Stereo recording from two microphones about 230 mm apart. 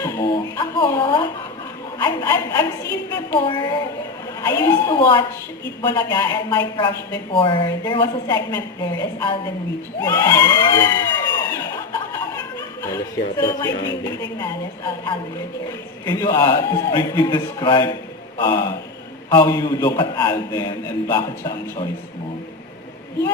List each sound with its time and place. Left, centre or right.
0.3 s a sound: centre
2.0 s a man's voice: centre
10.0 s crowd: centre
16.0 s a man's voice: centre